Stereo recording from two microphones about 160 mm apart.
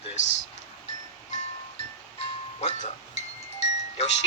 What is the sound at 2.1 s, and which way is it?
Music, 40° left (ahead or behind).